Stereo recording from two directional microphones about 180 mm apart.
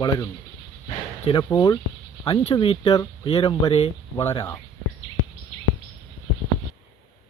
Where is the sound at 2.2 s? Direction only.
30° left (ahead or behind).